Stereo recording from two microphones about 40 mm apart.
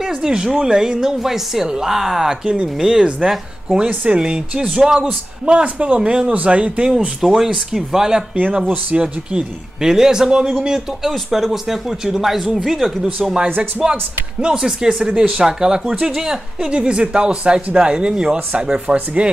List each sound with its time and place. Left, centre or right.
0.0 s a man's voice: centre
3.6 s speech: right
5.0 s speech: right
7.2 s a man's voice: centre
8.9 s a man's voice: right; by 13.3 s centre
13.6 s a man's voice: right; by 16.3 s centre
16.6 s speech: right